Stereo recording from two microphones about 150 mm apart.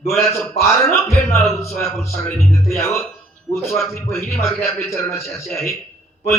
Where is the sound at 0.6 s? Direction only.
20° left (ahead or behind).